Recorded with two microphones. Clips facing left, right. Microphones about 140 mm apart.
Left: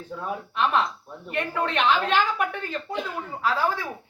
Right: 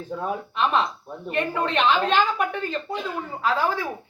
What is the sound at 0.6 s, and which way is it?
Speech, 10° right (ahead or behind).